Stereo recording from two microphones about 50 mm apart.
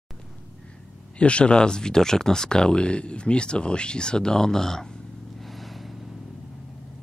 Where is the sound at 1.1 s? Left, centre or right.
Left.